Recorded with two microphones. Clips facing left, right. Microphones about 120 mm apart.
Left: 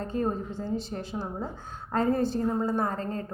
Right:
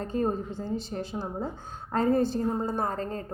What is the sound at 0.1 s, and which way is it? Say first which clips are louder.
Speech: right 1 dB; 35° right (ahead or behind).